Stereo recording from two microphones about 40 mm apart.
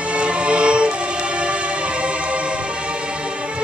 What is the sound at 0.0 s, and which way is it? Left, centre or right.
Music, right.